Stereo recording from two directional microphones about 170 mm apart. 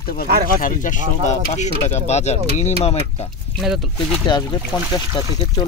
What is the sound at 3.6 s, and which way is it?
Speech, centre (ahead or behind).